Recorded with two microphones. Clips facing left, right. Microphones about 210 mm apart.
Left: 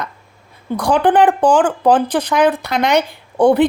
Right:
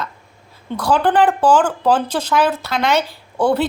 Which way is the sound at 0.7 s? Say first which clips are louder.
Left 3 dB; 10° left (ahead or behind).